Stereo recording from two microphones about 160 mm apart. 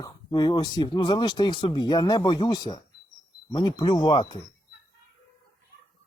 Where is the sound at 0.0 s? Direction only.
25° left (ahead or behind).